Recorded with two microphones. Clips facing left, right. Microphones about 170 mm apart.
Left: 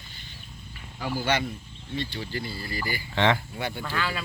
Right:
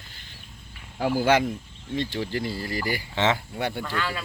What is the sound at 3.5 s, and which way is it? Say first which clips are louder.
Speech: right 4 dB; 65° right (ahead or behind).